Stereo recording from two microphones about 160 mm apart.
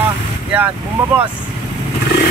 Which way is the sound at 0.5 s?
10° right (ahead or behind).